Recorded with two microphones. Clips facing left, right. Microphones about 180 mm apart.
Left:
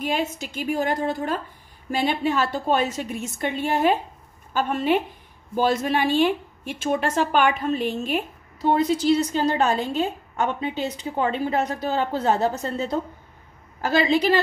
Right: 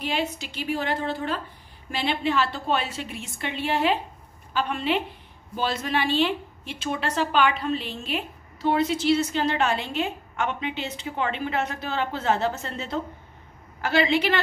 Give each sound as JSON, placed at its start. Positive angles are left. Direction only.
{"t": 0.0, "sound": "a woman's voice", "side_deg": 45}